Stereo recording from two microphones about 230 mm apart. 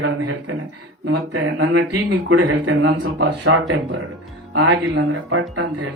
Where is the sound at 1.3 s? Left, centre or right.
Right.